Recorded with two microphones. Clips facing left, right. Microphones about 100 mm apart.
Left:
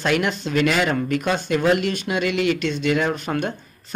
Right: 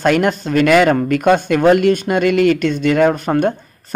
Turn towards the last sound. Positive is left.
turn(degrees=-45)  # may be behind; listen again after turning